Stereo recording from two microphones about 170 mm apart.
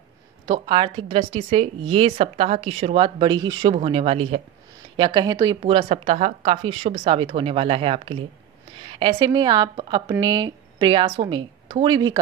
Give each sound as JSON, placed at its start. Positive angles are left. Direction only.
{"t": 0.5, "sound": "a woman's voice", "side_deg": -30}
{"t": 5.6, "sound": "a woman's voice", "side_deg": -35}